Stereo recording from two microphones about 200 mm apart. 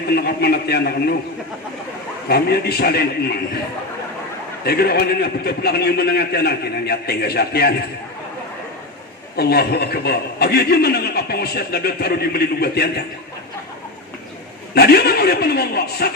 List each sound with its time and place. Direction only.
0.1 s a man's voice: 50° left (ahead or behind)
2.3 s a man's voice: 50° left (ahead or behind)
4.6 s a man's voice: 50° left (ahead or behind)
9.3 s a man's voice: 50° left (ahead or behind)
14.8 s a man's voice: 50° left (ahead or behind)